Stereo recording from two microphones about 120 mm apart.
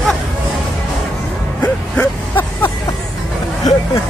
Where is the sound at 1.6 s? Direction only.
15° left (ahead or behind).